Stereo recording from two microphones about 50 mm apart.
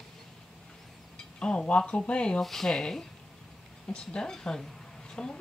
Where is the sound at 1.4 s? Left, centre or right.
Left.